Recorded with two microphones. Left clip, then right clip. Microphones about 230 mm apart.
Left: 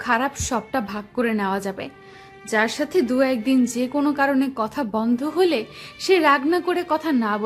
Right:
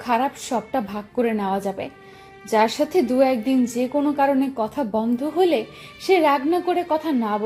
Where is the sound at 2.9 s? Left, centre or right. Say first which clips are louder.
Right 1 dB; left.